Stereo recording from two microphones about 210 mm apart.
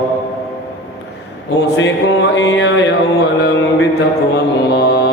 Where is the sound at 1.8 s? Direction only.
60° left (ahead or behind).